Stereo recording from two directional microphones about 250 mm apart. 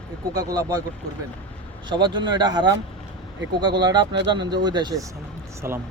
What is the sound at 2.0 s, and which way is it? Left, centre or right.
Speech, centre.